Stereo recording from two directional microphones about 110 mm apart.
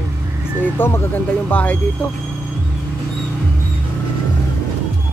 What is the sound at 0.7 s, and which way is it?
Speech, 20° left (ahead or behind).